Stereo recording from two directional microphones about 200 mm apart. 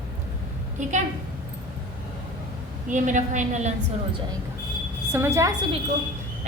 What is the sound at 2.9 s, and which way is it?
Speech, 40° right (ahead or behind).